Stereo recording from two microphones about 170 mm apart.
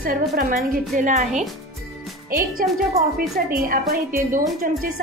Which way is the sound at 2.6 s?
55° right (ahead or behind).